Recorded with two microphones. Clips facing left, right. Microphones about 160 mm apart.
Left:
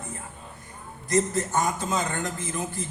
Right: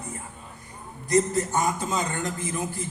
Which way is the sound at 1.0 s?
20° right (ahead or behind).